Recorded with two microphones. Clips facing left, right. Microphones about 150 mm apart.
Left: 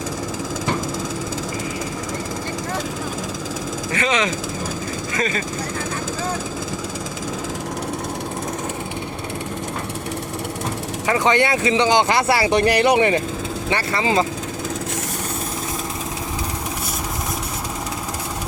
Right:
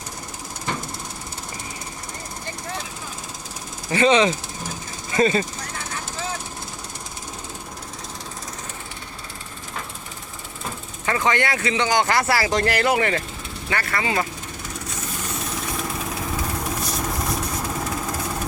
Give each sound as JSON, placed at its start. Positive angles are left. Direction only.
{"t": 3.9, "sound": "speech", "side_deg": -30}
{"t": 11.0, "sound": "speech", "side_deg": 15}